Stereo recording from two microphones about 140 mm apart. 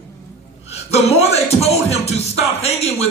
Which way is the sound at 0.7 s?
50° left (ahead or behind).